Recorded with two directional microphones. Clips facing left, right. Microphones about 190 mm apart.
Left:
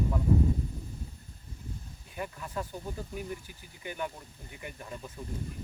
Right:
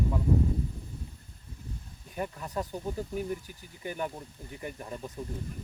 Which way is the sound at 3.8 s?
40° right (ahead or behind).